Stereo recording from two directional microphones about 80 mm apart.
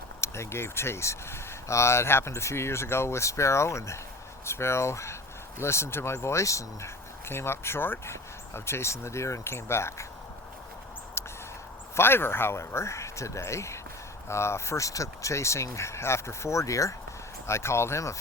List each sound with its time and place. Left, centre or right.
0.2 s speech: left
11.2 s a sound: left
11.9 s speech: left